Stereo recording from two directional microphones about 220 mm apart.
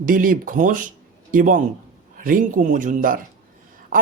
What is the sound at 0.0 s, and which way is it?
Speech, 40° right (ahead or behind).